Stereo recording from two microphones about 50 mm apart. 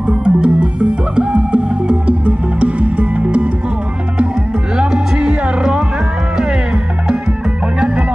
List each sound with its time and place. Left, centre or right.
0.1 s music: centre
4.7 s music: right